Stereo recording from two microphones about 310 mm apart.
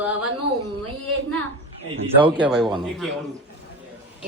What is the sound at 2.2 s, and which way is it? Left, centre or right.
Speech, centre.